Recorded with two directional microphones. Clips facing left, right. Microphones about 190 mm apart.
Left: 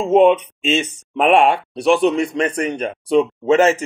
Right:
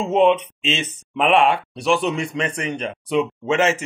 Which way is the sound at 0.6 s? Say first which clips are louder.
Left 6 dB; 45° left (ahead or behind).